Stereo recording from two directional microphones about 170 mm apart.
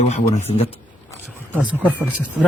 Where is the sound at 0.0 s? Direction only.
45° left (ahead or behind).